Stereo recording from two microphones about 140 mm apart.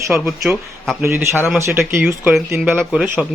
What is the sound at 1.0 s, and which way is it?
Speech, 20° right (ahead or behind).